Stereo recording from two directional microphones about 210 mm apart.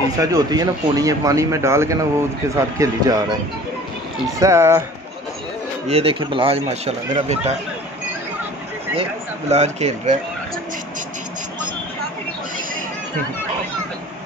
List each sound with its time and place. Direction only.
0.2 s speech: 20° right (ahead or behind)
4.4 s speech: 15° right (ahead or behind)
5.9 s speech: 25° right (ahead or behind)
9.5 s speech: 30° right (ahead or behind)